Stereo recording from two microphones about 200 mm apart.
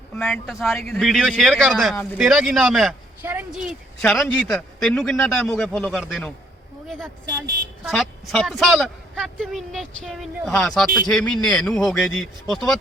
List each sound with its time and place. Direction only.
0.2 s a man's voice: centre (ahead or behind)
7.9 s a man's voice: centre (ahead or behind)